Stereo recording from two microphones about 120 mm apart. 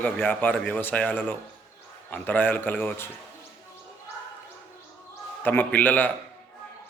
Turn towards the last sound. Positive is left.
turn(degrees=15)  # may be behind; listen again after turning